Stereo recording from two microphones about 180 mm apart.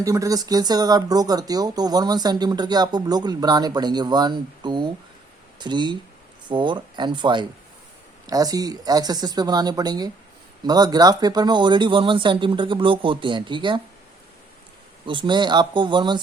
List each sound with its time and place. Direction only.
0.0 s speech: 20° right (ahead or behind)
15.0 s speech: 25° right (ahead or behind)